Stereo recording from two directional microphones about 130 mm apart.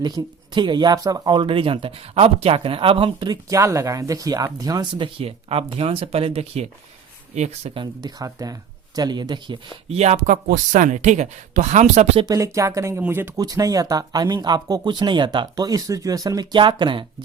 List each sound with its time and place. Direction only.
0.0 s speech: 30° right (ahead or behind)
3.5 s speech: 25° right (ahead or behind); by 7.8 s 55° right (ahead or behind)
7.8 s speech: 30° right (ahead or behind)
9.9 s speech: 60° right (ahead or behind)
12.2 s speech: 25° right (ahead or behind)
13.4 s speech: 30° right (ahead or behind)